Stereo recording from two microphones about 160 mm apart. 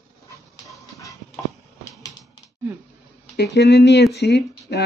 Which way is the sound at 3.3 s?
90° left.